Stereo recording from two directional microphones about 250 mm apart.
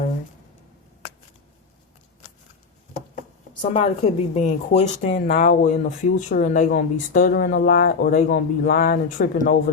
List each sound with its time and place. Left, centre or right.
3.6 s a woman's voice: left